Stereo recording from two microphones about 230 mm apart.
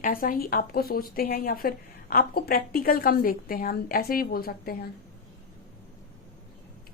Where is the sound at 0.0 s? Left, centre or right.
Left.